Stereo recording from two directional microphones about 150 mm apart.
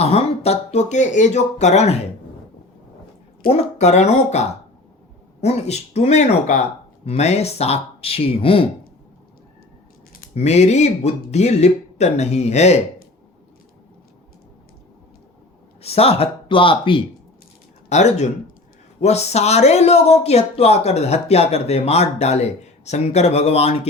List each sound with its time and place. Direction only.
0.0 s speech: 45° left (ahead or behind)
3.5 s speech: 50° left (ahead or behind)
10.3 s speech: 50° left (ahead or behind)
15.8 s speech: 40° left (ahead or behind)
17.8 s speech: 50° left (ahead or behind)